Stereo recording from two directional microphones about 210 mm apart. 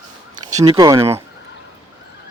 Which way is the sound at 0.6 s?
15° right (ahead or behind).